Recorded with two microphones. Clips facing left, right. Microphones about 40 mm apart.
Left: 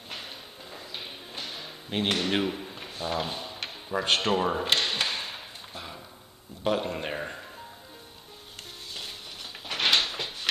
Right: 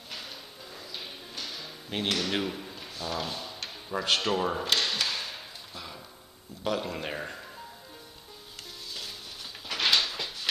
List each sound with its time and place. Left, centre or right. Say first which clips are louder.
0.7 s music: left 1 dB; left
2.0 s speech: left 3 dB; left
2.7 s drawer open or close: left 3 dB; left
4.0 s speech: left 2 dB; left
4.6 s a sound: left 2 dB; left
6.6 s speech: left 3 dB; left
7.1 s music: left 2 dB; centre
9.7 s a sound: left 1 dB; left